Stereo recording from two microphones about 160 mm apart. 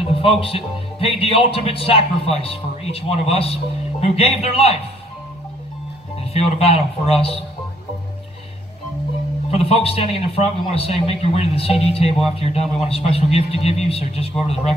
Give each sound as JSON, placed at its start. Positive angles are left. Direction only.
{"t": 0.1, "sound": "speech", "side_deg": 35}
{"t": 6.3, "sound": "speech", "side_deg": 40}
{"t": 9.5, "sound": "speech", "side_deg": 40}